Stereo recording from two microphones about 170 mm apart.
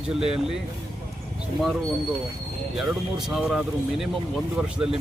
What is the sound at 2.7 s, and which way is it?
Speech, centre (ahead or behind).